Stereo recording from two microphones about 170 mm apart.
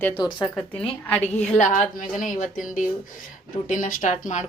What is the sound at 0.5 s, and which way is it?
Speech, 5° left (ahead or behind).